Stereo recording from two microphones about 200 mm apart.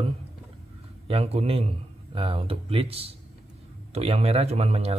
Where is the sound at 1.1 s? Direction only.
30° right (ahead or behind).